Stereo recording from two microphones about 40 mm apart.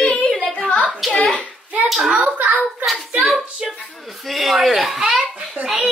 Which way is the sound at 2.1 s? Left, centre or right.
Right.